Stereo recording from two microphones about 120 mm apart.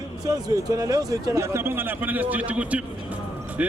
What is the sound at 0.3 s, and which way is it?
Speech, 30° right (ahead or behind).